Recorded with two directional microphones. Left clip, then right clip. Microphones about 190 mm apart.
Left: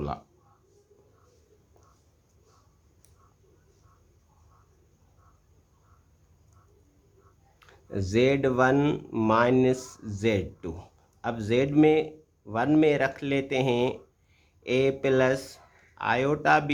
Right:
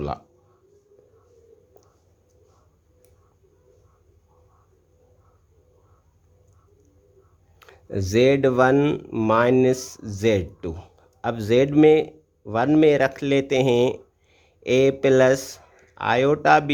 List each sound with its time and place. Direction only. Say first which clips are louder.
7.6 s speech: right 5 dB; 25° right (ahead or behind)